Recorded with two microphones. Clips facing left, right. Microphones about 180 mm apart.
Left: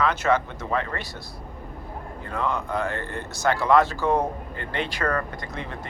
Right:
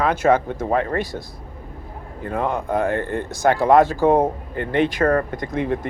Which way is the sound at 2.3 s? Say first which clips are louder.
Right 5 dB; 50° right (ahead or behind).